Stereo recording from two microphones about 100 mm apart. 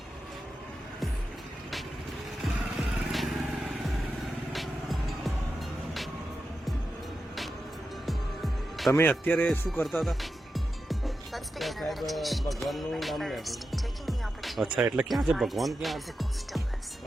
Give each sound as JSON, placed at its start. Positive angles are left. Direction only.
{"t": 3.1, "sound": "vehicle", "side_deg": 0}
{"t": 4.5, "sound": "music", "side_deg": 0}
{"t": 8.0, "sound": "music", "side_deg": 0}
{"t": 8.9, "sound": "speech", "side_deg": 20}
{"t": 9.8, "sound": "speech", "side_deg": 0}